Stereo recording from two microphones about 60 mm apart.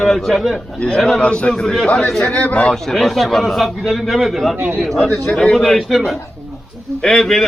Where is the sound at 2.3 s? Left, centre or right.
Left.